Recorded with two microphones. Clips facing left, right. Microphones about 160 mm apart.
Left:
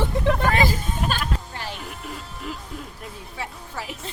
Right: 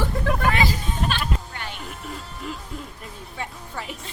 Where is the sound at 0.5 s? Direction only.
45° left (ahead or behind).